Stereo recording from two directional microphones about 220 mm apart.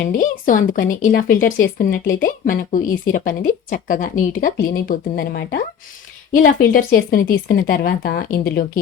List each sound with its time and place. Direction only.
0.0 s speech: 40° left (ahead or behind)